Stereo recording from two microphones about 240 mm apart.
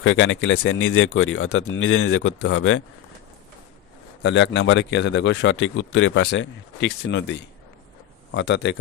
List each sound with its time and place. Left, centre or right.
0.0 s speech: left
4.2 s speech: left